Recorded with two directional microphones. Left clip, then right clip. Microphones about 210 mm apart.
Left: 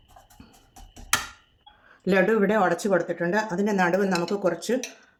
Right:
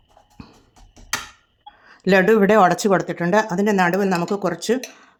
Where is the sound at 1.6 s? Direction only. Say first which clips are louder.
Right 6 dB; 40° right (ahead or behind).